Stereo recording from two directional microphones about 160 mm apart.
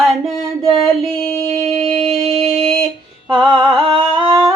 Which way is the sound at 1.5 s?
40° right (ahead or behind).